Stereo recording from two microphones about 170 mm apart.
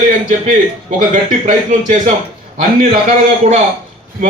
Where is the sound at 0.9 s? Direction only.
50° right (ahead or behind).